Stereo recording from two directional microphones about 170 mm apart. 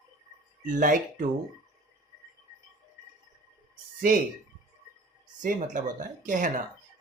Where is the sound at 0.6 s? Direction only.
50° right (ahead or behind).